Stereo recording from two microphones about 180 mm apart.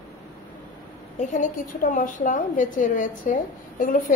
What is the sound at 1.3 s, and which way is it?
A woman's voice, 45° left (ahead or behind).